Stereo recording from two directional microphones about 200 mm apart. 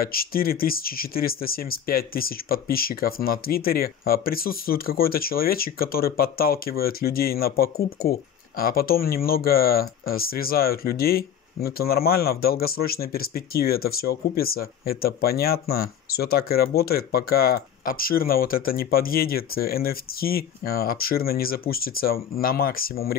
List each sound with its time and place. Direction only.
0.0 s speech: 50° left (ahead or behind)